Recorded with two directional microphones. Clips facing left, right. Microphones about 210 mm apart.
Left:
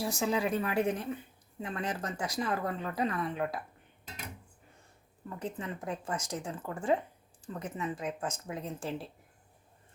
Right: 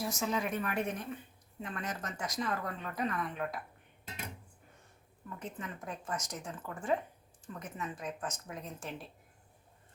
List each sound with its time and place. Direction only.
0.0 s speech: 30° left (ahead or behind)
5.4 s speech: 30° left (ahead or behind)